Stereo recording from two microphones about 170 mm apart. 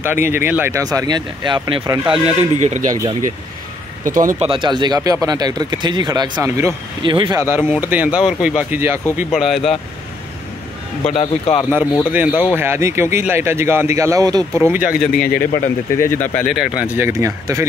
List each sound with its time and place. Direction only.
0.0 s speech: 15° right (ahead or behind)
2.2 s speech: 45° right (ahead or behind)
2.9 s speech: 20° right (ahead or behind)
4.0 s speech: 50° right (ahead or behind)
4.5 s speech: 30° right (ahead or behind)
9.3 s speech: centre (ahead or behind)
11.1 s a man's voice: 35° left (ahead or behind)
12.1 s speech: 10° right (ahead or behind)
15.6 s speech: 15° left (ahead or behind)
16.3 s speech: centre (ahead or behind); by 17.6 s 20° right (ahead or behind)